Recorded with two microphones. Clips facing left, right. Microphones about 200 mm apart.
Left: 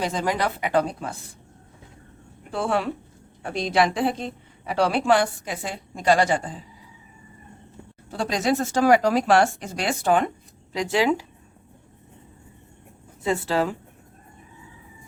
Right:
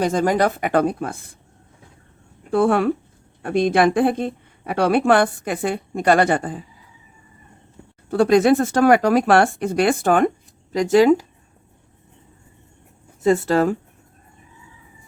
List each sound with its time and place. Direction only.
0.0 s speech: 45° right (ahead or behind)
2.5 s a woman's voice: 55° right (ahead or behind)
8.1 s a woman's voice: 55° right (ahead or behind)
13.2 s speech: 45° right (ahead or behind)